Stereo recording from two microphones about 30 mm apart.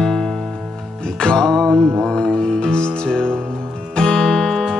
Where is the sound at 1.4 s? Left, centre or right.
Centre.